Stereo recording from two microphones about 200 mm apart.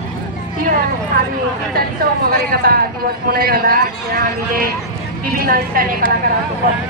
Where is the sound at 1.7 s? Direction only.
50° right (ahead or behind).